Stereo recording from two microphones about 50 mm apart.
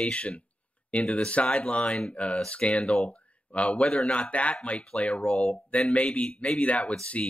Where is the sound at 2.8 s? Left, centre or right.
Centre.